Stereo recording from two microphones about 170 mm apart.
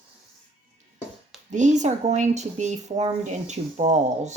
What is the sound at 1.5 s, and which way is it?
Speech, 45° right (ahead or behind).